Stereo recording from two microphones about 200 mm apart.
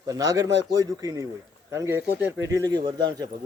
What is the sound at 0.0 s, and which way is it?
A man's voice, 20° right (ahead or behind).